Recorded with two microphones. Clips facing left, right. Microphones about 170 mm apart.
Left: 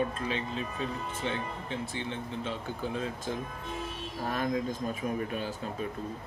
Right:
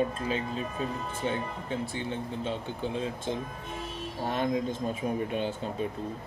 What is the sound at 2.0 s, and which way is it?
Speech, 30° right (ahead or behind).